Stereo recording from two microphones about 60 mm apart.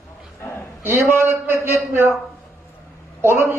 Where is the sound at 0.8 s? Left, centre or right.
Right.